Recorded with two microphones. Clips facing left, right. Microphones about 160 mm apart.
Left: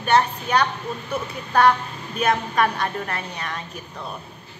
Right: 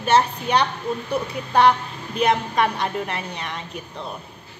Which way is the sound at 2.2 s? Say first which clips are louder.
Right 1 dB; 20° right (ahead or behind).